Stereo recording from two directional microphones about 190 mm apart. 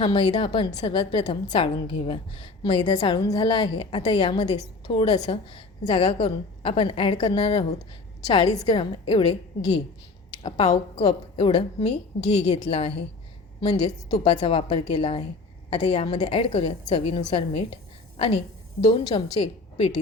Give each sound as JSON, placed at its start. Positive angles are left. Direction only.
{"t": 0.0, "sound": "a woman's voice", "side_deg": 25}
{"t": 8.2, "sound": "a woman's voice", "side_deg": 20}
{"t": 10.3, "sound": "a woman's voice", "side_deg": 30}
{"t": 18.8, "sound": "a woman's voice", "side_deg": 30}